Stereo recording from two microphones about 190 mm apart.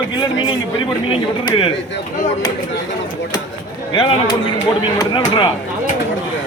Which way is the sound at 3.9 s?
25° left (ahead or behind).